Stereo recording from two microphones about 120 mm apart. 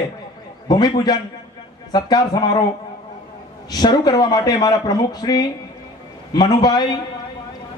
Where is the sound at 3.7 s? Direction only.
35° left (ahead or behind).